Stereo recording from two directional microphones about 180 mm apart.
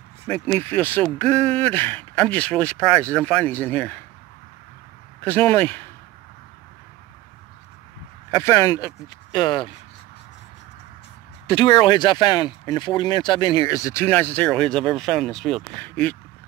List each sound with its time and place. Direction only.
0.3 s speech: 10° left (ahead or behind)
5.2 s speech: 10° left (ahead or behind)
8.3 s speech: 15° left (ahead or behind)
11.4 s speech: 25° left (ahead or behind); by 16.2 s 10° left (ahead or behind)